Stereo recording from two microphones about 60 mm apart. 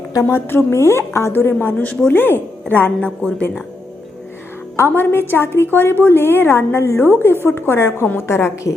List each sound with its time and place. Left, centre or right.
0.3 s speech: left
1.3 s a woman's voice: left
4.9 s a woman's voice: left